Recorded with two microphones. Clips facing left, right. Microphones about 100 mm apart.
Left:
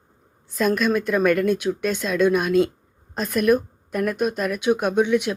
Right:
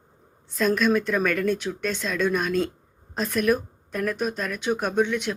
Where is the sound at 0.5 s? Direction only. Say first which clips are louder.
Left 1 dB; 5° left (ahead or behind).